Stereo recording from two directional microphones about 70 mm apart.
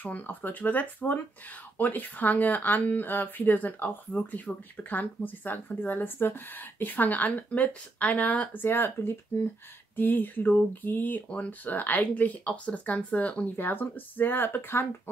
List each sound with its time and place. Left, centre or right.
0.0 s speech: left